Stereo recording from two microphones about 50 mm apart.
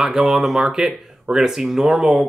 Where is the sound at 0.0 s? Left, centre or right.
Centre.